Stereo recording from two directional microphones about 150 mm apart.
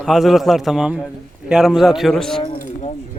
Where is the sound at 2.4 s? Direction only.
30° left (ahead or behind).